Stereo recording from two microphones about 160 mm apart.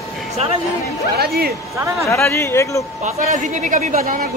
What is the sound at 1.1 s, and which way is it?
Speech, 80° right.